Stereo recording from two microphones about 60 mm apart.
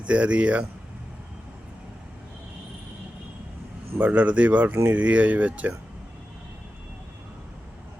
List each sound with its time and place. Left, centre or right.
0.0 s speech: right
4.0 s speech: right